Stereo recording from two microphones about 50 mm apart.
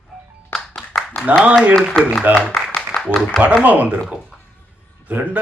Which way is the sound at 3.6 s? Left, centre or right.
Right.